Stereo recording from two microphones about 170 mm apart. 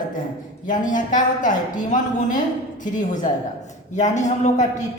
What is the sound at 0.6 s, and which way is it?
A woman's voice, 50° left (ahead or behind).